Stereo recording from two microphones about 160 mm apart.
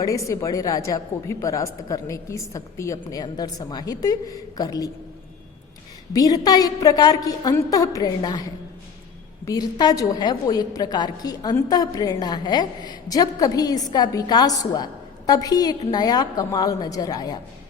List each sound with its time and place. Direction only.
0.0 s a woman's voice: 20° left (ahead or behind)
6.1 s a woman's voice: 25° left (ahead or behind)
9.5 s a woman's voice: 25° left (ahead or behind)